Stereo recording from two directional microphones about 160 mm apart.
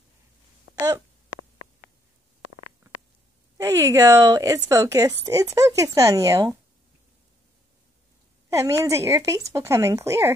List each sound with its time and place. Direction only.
3.5 s speech: 20° right (ahead or behind)
8.5 s speech: 20° right (ahead or behind)